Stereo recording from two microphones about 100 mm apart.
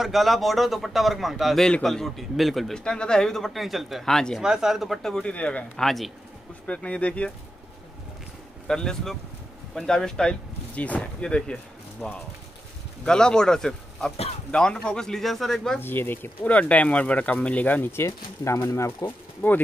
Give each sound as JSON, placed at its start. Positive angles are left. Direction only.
{"t": 0.0, "sound": "a man's voice", "side_deg": 0}
{"t": 4.4, "sound": "a man's voice", "side_deg": -5}
{"t": 8.6, "sound": "a man's voice", "side_deg": 5}
{"t": 15.8, "sound": "speech", "side_deg": 20}